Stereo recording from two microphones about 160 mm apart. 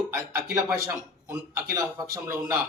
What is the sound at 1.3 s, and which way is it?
A man's voice, 20° right (ahead or behind).